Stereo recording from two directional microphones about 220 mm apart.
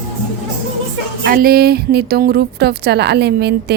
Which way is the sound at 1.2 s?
45° right (ahead or behind).